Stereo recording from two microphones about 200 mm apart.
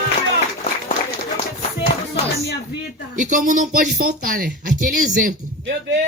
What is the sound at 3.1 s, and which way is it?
A child's voice, 40° right (ahead or behind).